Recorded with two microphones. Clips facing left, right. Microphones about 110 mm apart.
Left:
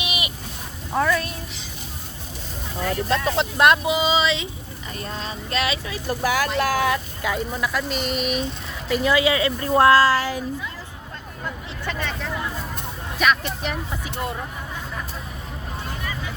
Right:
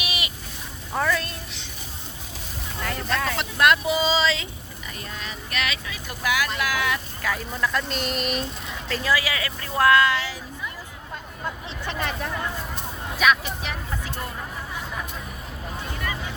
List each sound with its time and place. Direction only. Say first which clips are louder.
0.0 s bleat: left 2 dB; 20° left (ahead or behind)
0.9 s a woman's voice: left 3 dB; 5° left (ahead or behind)
2.8 s speech: left 4 dB; 90° right
3.3 s speech: left 3 dB; 20° left (ahead or behind)
4.9 s speech: left 5 dB; 35° left (ahead or behind)
6.9 s speech: left 3 dB; 20° left (ahead or behind)
7.5 s speech: left 1 dB; 5° left (ahead or behind)
8.9 s speech: left 6 dB; 20° left (ahead or behind); by 10.4 s 45° left (ahead or behind)
11.9 s speech: right 3 dB; 10° right (ahead or behind)
13.1 s speech: even; centre (ahead or behind)